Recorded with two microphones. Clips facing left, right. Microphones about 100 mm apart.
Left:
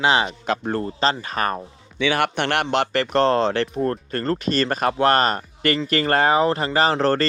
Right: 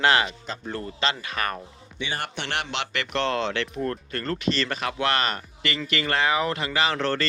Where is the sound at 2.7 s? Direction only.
40° left (ahead or behind).